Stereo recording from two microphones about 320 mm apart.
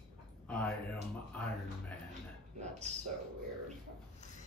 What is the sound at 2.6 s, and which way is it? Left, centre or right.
Speech, right.